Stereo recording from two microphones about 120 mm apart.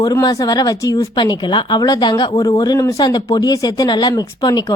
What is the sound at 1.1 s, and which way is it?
A woman's voice, 40° left (ahead or behind).